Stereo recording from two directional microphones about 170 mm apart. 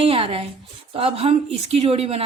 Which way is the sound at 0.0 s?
35° right (ahead or behind).